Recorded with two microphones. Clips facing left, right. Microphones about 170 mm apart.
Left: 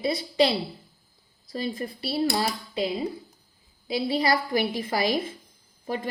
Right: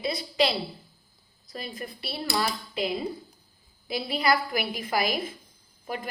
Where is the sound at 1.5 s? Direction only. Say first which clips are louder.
Left 7 dB; 35° left (ahead or behind).